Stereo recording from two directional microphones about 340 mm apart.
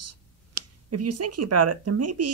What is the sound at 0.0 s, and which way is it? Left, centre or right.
Speech, right.